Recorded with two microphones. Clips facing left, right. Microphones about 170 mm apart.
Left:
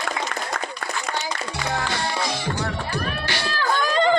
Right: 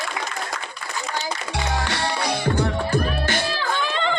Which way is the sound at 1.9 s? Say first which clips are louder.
Right 1 dB; 55° right (ahead or behind).